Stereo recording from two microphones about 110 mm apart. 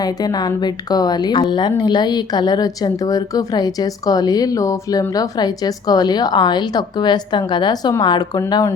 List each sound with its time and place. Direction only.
0.0 s a woman's voice: 35° left (ahead or behind)